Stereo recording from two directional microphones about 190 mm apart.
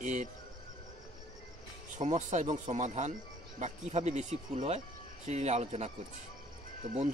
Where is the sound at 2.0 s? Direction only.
40° right (ahead or behind).